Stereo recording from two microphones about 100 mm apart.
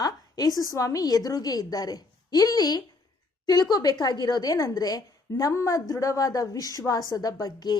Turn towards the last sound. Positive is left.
turn(degrees=45)  # may be behind; listen again after turning